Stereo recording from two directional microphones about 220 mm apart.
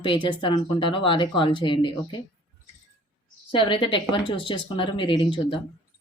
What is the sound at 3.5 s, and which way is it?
Speech, 20° left (ahead or behind).